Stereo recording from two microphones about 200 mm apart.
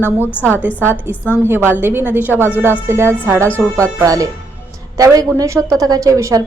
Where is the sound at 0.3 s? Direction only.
10° left (ahead or behind).